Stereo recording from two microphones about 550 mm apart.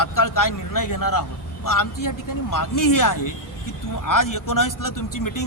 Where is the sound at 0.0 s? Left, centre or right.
Left.